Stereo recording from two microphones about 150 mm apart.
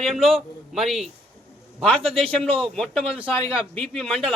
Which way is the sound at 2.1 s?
5° left (ahead or behind).